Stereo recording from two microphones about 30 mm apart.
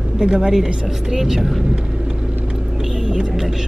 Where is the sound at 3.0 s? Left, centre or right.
Right.